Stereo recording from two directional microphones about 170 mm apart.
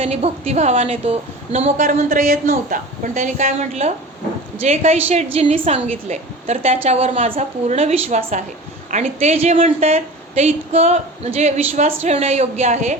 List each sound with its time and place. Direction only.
0.0 s a woman's voice: 40° right (ahead or behind)